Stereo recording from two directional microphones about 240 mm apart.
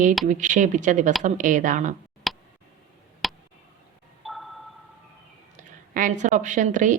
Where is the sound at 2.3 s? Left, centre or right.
Centre.